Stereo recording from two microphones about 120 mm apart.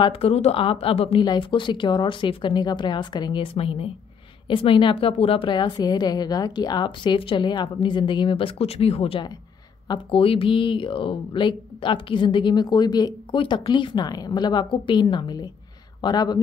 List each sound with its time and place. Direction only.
0.0 s speech: 55° left (ahead or behind)
1.2 s speech: 40° left (ahead or behind)
3.5 s speech: 50° left (ahead or behind)
5.6 s speech: 35° left (ahead or behind)